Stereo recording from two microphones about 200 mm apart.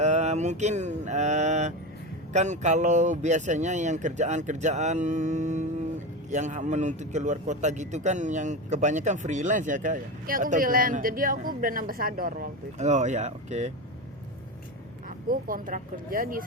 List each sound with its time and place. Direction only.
0.0 s a man's voice: 35° right (ahead or behind)
15.3 s speech: 45° right (ahead or behind)